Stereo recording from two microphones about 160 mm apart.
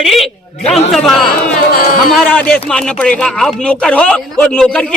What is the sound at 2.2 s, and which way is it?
Speech, 5° left (ahead or behind).